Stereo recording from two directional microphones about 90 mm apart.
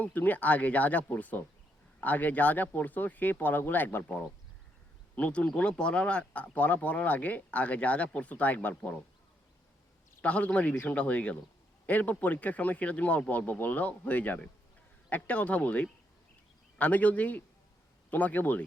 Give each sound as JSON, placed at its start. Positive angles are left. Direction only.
{"t": 0.0, "sound": "speech", "side_deg": 20}
{"t": 5.1, "sound": "speech", "side_deg": 15}
{"t": 10.2, "sound": "speech", "side_deg": 15}